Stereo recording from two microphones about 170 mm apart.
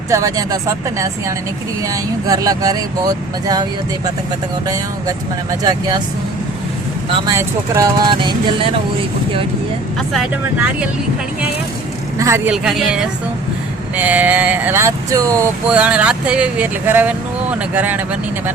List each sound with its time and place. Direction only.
0.1 s speech: 20° right (ahead or behind)
4.6 s speech: 20° right (ahead or behind)
7.3 s speech: 20° right (ahead or behind)
12.5 s speech: 5° right (ahead or behind); by 15.4 s 20° right (ahead or behind)
15.6 s speech: 5° right (ahead or behind)